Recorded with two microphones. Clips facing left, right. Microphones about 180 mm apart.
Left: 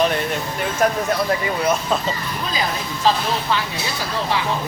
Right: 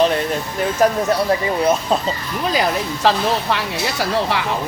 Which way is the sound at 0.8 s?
35° right (ahead or behind).